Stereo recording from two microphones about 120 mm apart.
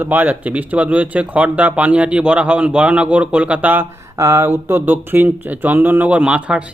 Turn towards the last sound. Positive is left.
turn(degrees=-10)  # may be behind; listen again after turning